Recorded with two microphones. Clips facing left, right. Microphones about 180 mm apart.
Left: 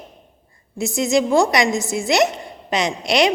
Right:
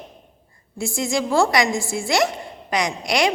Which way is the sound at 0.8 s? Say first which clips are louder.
Left 5 dB; 20° left (ahead or behind).